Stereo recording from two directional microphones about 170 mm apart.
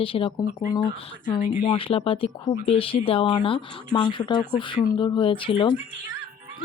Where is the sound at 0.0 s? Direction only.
30° left (ahead or behind).